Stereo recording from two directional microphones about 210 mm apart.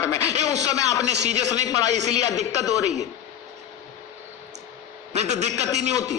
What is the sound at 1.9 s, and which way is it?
Speech, 35° right (ahead or behind).